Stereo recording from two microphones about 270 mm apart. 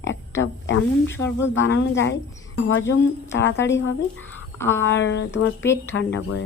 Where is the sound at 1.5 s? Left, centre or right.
Left.